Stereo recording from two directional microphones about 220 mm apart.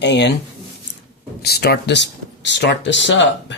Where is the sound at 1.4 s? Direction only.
45° left (ahead or behind).